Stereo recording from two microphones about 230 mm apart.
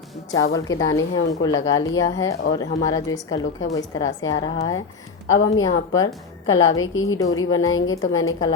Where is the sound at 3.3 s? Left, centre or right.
Left.